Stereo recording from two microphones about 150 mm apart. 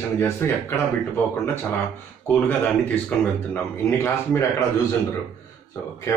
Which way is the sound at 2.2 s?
10° left (ahead or behind).